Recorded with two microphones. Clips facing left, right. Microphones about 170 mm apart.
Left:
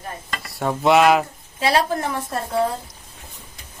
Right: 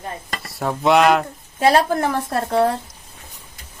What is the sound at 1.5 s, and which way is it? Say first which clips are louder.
A woman's voice: right 4 dB; 50° right (ahead or behind).